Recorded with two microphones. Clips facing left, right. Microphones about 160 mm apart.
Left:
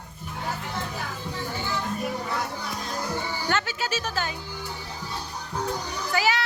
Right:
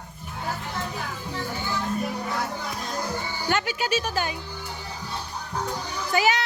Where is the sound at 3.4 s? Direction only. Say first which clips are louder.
Right 4 dB; 15° right (ahead or behind).